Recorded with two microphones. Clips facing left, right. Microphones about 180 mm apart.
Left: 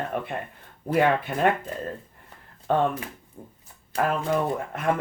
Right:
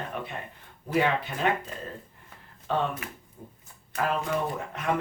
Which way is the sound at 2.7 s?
50° left (ahead or behind).